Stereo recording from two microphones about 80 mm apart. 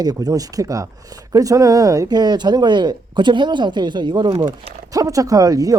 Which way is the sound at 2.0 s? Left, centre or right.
Right.